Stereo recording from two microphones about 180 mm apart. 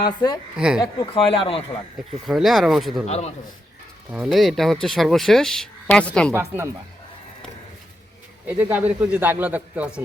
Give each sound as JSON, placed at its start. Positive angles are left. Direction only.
{"t": 0.2, "sound": "speech", "side_deg": 25}
{"t": 0.5, "sound": "speech", "side_deg": -5}
{"t": 0.8, "sound": "a man's voice", "side_deg": 25}
{"t": 2.2, "sound": "speech", "side_deg": 0}
{"t": 3.1, "sound": "a man's voice", "side_deg": 35}
{"t": 4.1, "sound": "speech", "side_deg": -5}
{"t": 6.3, "sound": "a man's voice", "side_deg": -15}
{"t": 8.4, "sound": "a man's voice", "side_deg": -10}